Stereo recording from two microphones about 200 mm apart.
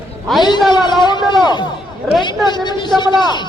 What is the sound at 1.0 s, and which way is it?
A man's voice, 20° left (ahead or behind).